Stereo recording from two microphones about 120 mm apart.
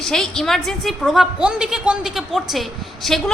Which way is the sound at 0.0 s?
5° left (ahead or behind).